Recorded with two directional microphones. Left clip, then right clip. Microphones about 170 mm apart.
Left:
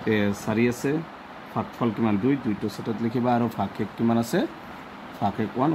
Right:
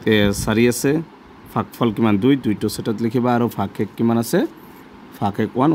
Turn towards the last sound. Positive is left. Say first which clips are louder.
# right 6 dB
turn(degrees=-70)  # may be behind; listen again after turning